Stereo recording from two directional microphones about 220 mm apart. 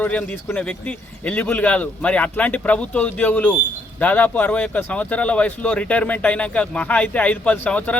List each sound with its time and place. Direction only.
0.0 s speech: 5° left (ahead or behind)